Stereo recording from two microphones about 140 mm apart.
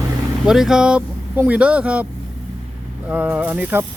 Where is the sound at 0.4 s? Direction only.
5° right (ahead or behind).